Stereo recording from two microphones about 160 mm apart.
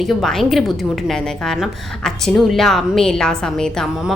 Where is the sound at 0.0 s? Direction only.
Centre (ahead or behind).